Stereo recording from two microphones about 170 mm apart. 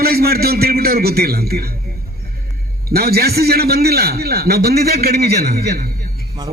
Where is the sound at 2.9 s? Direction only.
65° right (ahead or behind).